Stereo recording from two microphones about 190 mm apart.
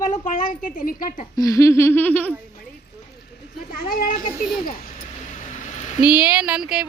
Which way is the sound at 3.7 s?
50° left (ahead or behind).